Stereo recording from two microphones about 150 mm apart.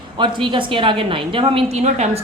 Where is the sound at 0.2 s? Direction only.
30° right (ahead or behind).